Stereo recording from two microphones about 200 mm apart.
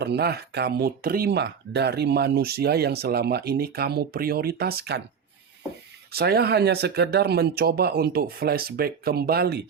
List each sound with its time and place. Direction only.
0.0 s speech: 55° right (ahead or behind)
6.1 s speech: 50° right (ahead or behind)